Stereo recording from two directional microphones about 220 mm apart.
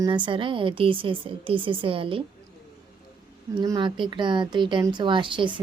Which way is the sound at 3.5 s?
20° right (ahead or behind).